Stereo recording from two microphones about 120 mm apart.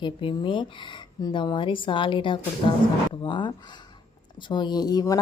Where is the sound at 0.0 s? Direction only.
45° left (ahead or behind).